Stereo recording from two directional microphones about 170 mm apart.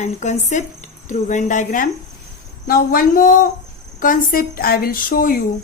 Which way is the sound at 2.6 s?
60° left (ahead or behind).